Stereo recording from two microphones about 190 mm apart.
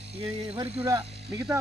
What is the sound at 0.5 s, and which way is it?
Speech, 30° right (ahead or behind).